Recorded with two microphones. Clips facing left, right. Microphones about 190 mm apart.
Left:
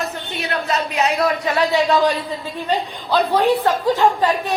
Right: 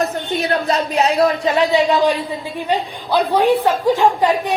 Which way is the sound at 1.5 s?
20° right (ahead or behind).